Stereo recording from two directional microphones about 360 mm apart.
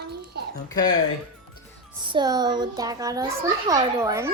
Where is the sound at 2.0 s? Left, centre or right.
Centre.